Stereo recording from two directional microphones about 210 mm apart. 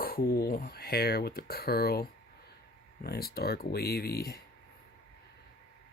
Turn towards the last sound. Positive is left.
turn(degrees=50)  # may be behind; listen again after turning